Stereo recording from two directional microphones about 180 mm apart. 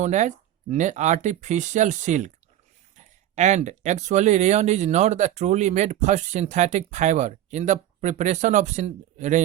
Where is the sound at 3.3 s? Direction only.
40° right (ahead or behind).